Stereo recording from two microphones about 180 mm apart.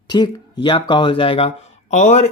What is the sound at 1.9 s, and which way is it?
Speech, 40° left (ahead or behind).